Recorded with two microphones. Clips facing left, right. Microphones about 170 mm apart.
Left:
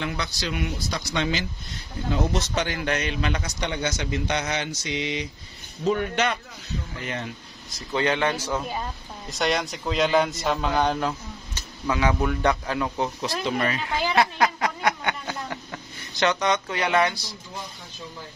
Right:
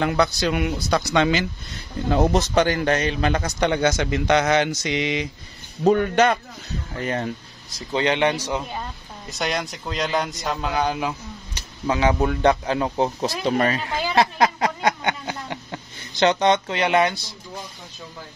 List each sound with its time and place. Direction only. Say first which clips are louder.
0.0 s speech: right 9 dB; 55° right (ahead or behind); by 1.4 s 70° right (ahead or behind)
2.0 s a man's voice: right 6 dB; 55° right (ahead or behind); by 5.2 s 90° right
5.9 s speech: right 7 dB; 45° right (ahead or behind)
7.9 s speech: right 3 dB; 20° right (ahead or behind)
9.3 s a man's voice: left 1 dB; centre (ahead or behind)
11.9 s speech: right 3 dB; 30° right (ahead or behind)